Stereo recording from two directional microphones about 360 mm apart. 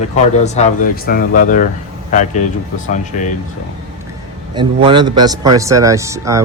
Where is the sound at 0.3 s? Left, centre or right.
Centre.